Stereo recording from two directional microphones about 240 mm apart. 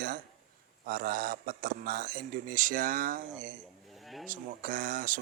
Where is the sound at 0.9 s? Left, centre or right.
Right.